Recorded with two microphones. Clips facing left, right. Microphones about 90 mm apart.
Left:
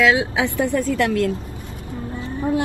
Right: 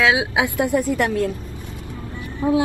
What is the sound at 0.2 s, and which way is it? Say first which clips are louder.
A woman's voice: even; 15° right (ahead or behind).